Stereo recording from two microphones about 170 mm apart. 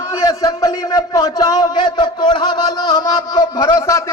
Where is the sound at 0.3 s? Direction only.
20° left (ahead or behind).